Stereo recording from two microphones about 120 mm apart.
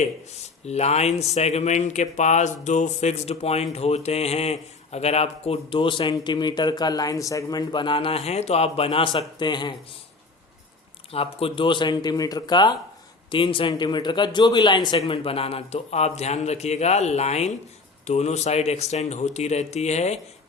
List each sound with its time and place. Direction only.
0.6 s speech: 65° left (ahead or behind); by 9.7 s 40° left (ahead or behind)
11.1 s a man's voice: 55° left (ahead or behind); by 14.9 s 35° left (ahead or behind)
14.9 s speech: 50° left (ahead or behind); by 20.1 s 70° left (ahead or behind)